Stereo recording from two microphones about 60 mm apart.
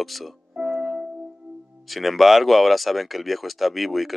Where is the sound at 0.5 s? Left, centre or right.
Right.